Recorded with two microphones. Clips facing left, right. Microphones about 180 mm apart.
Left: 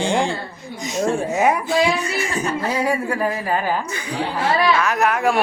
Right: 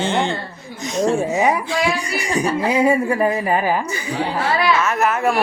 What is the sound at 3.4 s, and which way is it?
A woman's voice, 10° right (ahead or behind).